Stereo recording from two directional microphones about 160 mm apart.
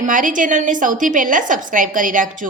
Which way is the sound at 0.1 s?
55° right (ahead or behind).